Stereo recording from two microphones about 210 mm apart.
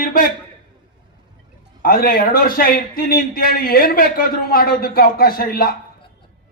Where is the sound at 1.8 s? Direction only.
45° left (ahead or behind).